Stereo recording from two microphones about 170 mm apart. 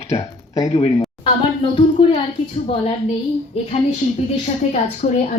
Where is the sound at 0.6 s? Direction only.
35° left (ahead or behind).